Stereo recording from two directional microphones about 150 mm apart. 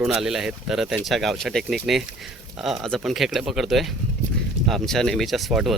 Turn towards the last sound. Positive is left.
turn(degrees=0)  # may be behind; listen again after turning